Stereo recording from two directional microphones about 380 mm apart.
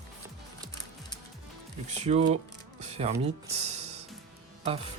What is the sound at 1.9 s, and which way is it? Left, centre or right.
Speech, centre.